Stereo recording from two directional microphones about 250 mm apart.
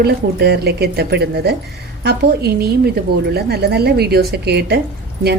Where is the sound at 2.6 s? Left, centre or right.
Right.